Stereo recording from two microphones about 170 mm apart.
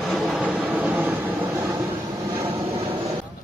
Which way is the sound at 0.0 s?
Centre (ahead or behind).